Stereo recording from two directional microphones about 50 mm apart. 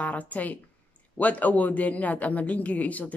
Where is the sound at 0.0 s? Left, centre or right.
Left.